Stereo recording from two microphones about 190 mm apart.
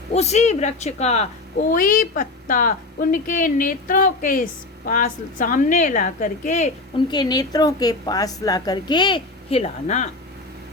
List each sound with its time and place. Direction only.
0.1 s speech: 35° left (ahead or behind)
6.9 s a woman's voice: 25° left (ahead or behind); by 10.1 s 40° left (ahead or behind)